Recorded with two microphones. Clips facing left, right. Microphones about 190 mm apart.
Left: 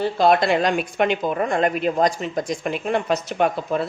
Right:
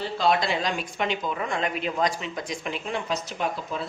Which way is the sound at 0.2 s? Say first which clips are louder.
Left 6 dB; 55° left (ahead or behind).